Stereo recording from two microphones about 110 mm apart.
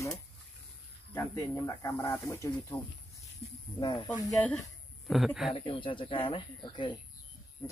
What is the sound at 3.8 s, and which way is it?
Speech, 45° left (ahead or behind).